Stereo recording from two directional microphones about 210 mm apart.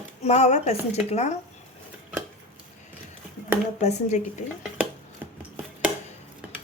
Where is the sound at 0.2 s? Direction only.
30° left (ahead or behind).